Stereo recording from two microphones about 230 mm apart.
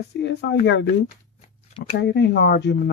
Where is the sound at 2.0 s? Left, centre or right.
Left.